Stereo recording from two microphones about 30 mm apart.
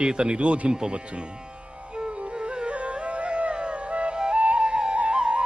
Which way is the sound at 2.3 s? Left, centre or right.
Right.